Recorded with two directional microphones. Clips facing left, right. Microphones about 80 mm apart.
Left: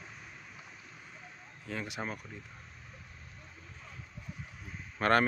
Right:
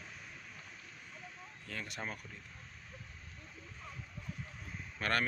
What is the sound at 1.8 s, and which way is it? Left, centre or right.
Speech, centre.